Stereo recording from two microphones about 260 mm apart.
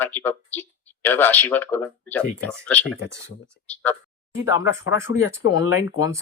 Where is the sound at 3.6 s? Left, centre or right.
Left.